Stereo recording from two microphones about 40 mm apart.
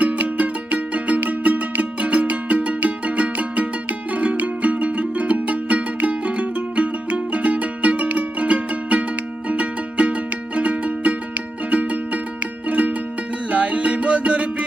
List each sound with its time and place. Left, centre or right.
0.0 s music: right